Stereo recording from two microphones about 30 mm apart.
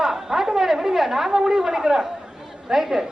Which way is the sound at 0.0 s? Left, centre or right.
Centre.